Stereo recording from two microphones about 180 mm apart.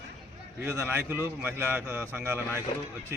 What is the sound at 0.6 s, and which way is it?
A man's voice, 10° right (ahead or behind).